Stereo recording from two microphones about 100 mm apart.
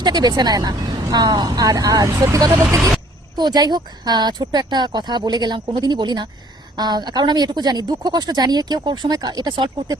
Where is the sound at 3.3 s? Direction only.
45° right (ahead or behind).